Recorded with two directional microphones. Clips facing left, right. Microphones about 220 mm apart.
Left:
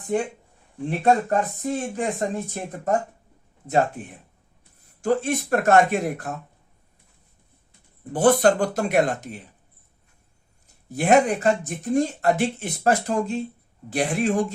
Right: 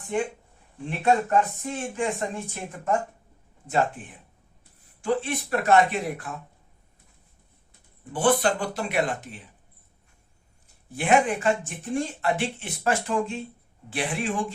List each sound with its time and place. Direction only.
0.9 s speech: 40° left (ahead or behind)
8.1 s speech: 45° left (ahead or behind)
10.8 s speech: 40° left (ahead or behind)